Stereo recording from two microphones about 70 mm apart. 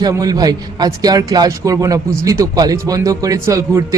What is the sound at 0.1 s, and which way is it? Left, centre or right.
Speech, right.